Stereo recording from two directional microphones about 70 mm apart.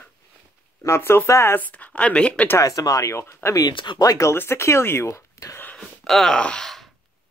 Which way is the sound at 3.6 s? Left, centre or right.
Left.